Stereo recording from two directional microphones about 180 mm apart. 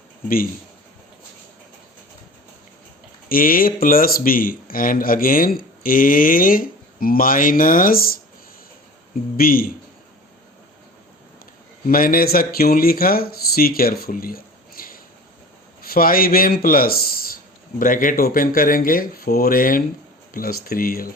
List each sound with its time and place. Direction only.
3.2 s speech: 50° left (ahead or behind)
9.4 s speech: 55° left (ahead or behind)
11.9 s speech: 55° left (ahead or behind)